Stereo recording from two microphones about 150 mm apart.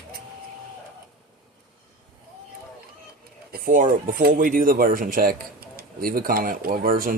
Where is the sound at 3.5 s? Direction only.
65° right (ahead or behind).